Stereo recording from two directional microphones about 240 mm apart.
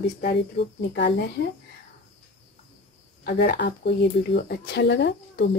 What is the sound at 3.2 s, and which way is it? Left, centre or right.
Speech, left.